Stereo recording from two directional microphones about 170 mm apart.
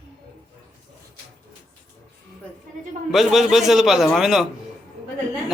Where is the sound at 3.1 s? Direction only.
Centre (ahead or behind).